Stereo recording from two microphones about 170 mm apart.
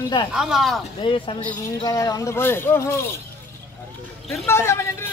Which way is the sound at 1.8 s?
20° left (ahead or behind).